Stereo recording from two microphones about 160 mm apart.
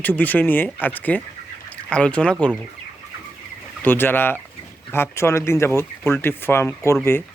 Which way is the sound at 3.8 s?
15° left (ahead or behind).